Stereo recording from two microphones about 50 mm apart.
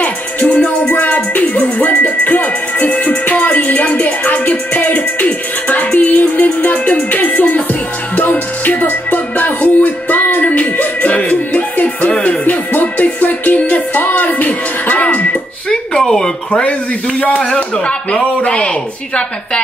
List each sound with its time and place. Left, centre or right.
0.0 s music: left
16.0 s a sound: centre
17.6 s speech: left